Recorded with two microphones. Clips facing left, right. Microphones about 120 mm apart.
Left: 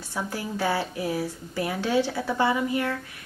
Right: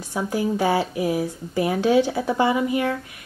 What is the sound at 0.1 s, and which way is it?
Speech, 15° right (ahead or behind).